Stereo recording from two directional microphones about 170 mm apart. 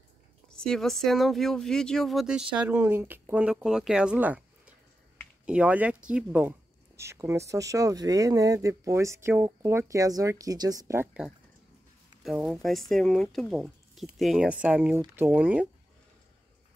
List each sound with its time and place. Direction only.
0.5 s speech: 5° left (ahead or behind); by 11.1 s 20° right (ahead or behind)
12.2 s speech: centre (ahead or behind)